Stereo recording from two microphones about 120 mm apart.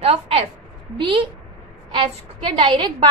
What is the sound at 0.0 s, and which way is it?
A woman's voice, 55° right (ahead or behind).